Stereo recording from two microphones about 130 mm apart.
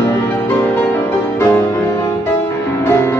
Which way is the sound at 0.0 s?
20° left (ahead or behind).